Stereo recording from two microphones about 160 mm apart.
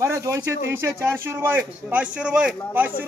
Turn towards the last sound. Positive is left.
turn(degrees=-10)  # may be behind; listen again after turning